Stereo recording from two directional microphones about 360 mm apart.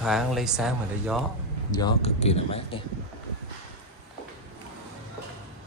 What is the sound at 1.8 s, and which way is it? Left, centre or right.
Speech, centre.